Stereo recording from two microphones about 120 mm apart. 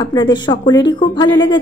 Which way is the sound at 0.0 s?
35° left (ahead or behind).